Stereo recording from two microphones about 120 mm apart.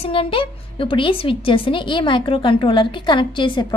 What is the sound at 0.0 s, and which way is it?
A woman's voice, 50° left (ahead or behind).